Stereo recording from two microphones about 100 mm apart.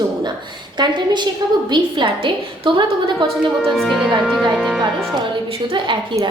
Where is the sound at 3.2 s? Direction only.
Centre (ahead or behind).